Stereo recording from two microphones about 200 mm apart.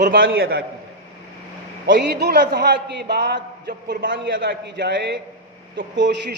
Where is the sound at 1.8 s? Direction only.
55° right (ahead or behind).